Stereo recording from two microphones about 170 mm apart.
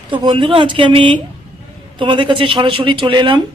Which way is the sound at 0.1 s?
30° right (ahead or behind).